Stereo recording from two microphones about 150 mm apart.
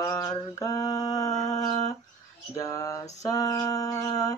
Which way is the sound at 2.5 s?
20° left (ahead or behind).